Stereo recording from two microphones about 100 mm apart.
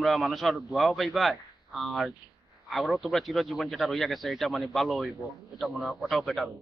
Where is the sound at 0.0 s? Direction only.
Centre (ahead or behind).